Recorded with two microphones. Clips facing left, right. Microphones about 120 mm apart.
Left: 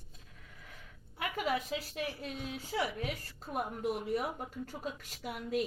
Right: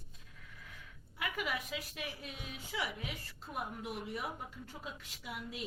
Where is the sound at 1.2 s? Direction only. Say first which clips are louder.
Left 5 dB; 35° left (ahead or behind).